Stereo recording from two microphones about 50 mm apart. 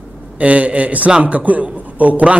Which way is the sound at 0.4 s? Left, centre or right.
Right.